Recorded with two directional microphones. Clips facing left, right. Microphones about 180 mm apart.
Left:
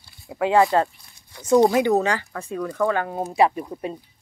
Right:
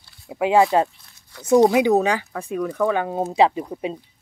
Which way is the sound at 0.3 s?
15° right (ahead or behind).